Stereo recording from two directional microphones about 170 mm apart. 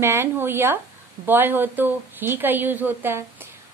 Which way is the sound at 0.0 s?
15° right (ahead or behind).